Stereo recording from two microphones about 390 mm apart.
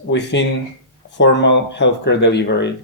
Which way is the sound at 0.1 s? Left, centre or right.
Left.